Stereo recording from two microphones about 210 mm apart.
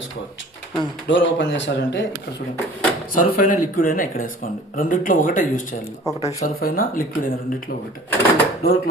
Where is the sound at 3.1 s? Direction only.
40° left (ahead or behind).